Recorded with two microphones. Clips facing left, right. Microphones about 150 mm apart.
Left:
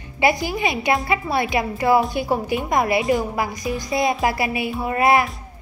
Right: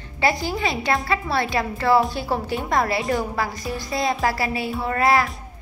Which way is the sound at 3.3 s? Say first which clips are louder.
Left 2 dB; 15° left (ahead or behind).